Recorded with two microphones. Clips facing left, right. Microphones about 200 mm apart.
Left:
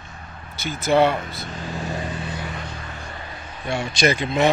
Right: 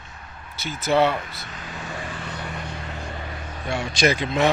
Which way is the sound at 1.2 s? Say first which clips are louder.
Left 5 dB; 50° left (ahead or behind).